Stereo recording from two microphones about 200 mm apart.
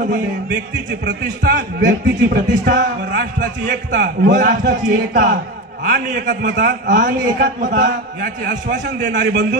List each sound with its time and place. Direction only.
1.0 s speech: 60° right (ahead or behind)
4.3 s a man's voice: 45° right (ahead or behind)